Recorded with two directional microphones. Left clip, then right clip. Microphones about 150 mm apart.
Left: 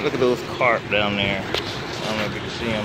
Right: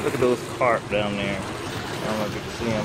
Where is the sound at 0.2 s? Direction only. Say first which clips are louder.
Left 1 dB; 40° left (ahead or behind).